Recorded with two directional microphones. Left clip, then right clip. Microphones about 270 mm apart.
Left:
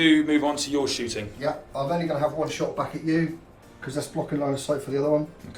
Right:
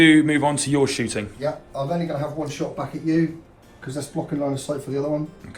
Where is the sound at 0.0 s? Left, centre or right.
Right.